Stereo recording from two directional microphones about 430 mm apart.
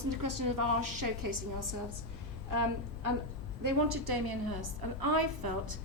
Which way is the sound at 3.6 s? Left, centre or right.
Right.